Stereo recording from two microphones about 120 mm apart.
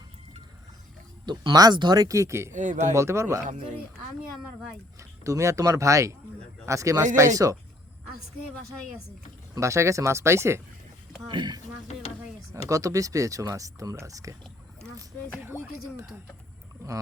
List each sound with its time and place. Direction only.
1.2 s speech: 40° right (ahead or behind); by 2.5 s 25° right (ahead or behind)
2.5 s speech: 90° right
2.9 s speech: 25° right (ahead or behind)
4.9 s speech: 25° right (ahead or behind)
9.6 s speech: 25° right (ahead or behind)
11.3 s speech: 40° right (ahead or behind)
12.6 s speech: 25° right (ahead or behind)
15.4 s speech: 20° right (ahead or behind)